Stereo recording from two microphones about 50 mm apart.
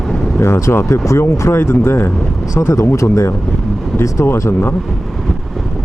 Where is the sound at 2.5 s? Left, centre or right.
Left.